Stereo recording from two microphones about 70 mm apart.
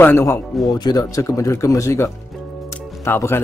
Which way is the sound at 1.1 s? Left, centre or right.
Left.